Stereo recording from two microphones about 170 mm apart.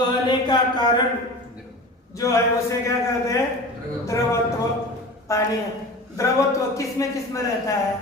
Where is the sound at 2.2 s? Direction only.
15° left (ahead or behind).